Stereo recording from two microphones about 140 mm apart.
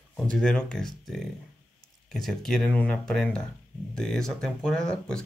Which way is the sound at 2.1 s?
Centre (ahead or behind).